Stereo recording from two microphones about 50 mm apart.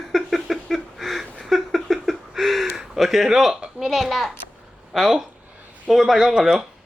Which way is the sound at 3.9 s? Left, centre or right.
Centre.